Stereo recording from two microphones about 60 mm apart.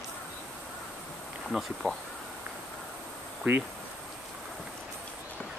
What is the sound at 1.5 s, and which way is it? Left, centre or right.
Speech, centre.